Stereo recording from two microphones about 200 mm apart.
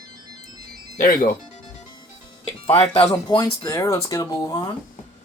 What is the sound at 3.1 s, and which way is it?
Speech, 20° left (ahead or behind).